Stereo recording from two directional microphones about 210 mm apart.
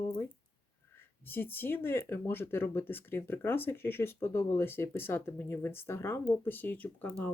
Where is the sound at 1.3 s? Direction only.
10° left (ahead or behind).